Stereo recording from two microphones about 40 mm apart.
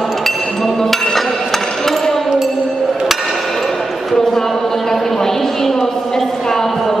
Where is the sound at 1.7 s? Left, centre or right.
Centre.